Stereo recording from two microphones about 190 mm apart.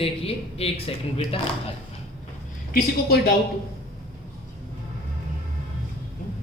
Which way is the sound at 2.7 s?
55° left (ahead or behind).